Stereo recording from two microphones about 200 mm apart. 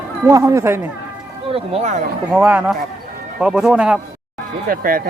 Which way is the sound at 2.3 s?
10° right (ahead or behind).